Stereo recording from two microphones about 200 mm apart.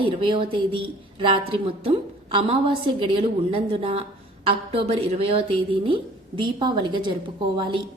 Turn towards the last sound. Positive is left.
turn(degrees=-25)  # may be behind; listen again after turning